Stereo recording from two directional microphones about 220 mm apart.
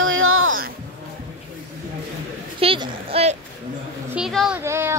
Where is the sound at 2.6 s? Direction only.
25° right (ahead or behind).